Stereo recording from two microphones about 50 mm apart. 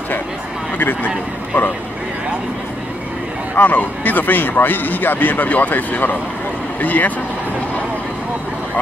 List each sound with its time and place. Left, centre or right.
0.7 s speech: left
3.5 s speech: left